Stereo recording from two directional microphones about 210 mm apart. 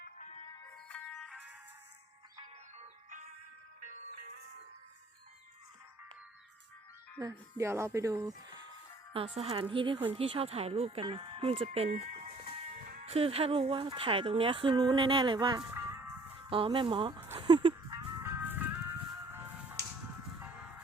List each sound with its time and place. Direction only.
0.0 s music: 35° left (ahead or behind)
0.9 s music: 5° left (ahead or behind)
2.7 s music: 35° right (ahead or behind)
7.2 s speech: 15° right (ahead or behind)
17.3 s a sound: 20° right (ahead or behind)
18.2 s music: 10° right (ahead or behind)